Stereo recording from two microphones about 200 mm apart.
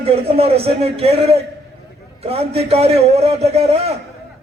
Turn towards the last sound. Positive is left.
turn(degrees=-30)  # may be behind; listen again after turning